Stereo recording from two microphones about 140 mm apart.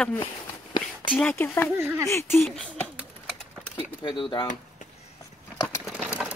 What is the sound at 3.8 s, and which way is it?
Speech, 35° left (ahead or behind).